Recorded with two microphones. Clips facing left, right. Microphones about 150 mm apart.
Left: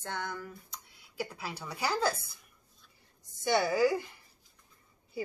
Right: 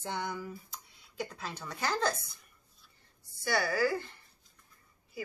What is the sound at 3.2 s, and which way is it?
A woman's voice, 20° left (ahead or behind).